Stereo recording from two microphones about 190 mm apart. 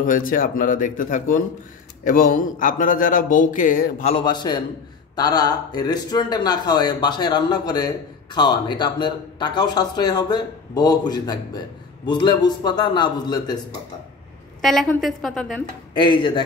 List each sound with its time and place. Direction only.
0.0 s speech: 45° left (ahead or behind)
4.1 s speech: 25° left (ahead or behind)
14.6 s a woman's voice: centre (ahead or behind)
15.9 s speech: 25° left (ahead or behind)